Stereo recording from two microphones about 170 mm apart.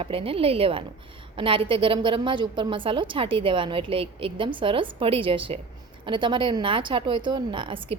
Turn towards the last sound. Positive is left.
turn(degrees=-30)  # may be behind; listen again after turning